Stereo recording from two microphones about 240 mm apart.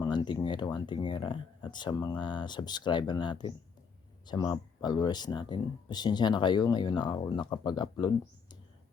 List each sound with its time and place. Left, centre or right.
0.0 s speech: centre